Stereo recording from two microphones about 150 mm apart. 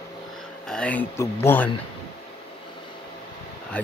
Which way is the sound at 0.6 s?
5° left (ahead or behind).